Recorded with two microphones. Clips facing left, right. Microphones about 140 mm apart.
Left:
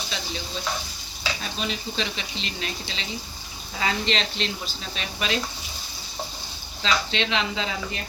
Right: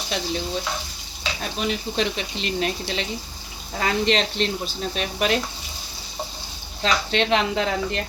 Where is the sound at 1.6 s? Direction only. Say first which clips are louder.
Right 7 dB; 55° right (ahead or behind).